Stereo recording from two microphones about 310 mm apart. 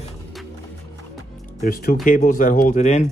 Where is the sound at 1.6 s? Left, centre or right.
Left.